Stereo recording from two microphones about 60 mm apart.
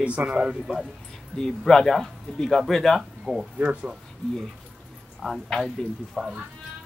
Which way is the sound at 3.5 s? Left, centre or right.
Right.